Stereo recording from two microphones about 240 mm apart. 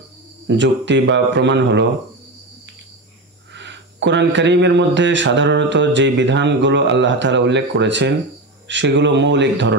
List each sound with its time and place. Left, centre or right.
0.5 s speech: right
3.5 s speech: right